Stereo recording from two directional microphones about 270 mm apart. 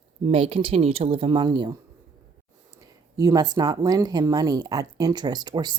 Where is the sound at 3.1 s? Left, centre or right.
Centre.